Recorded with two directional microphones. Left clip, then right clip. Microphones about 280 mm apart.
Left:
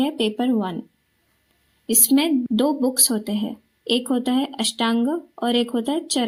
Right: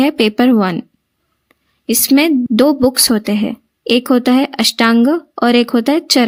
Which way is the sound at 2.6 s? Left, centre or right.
Right.